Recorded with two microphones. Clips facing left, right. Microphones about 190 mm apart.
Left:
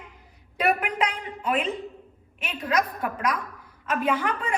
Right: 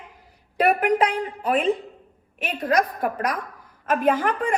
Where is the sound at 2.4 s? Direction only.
45° right (ahead or behind).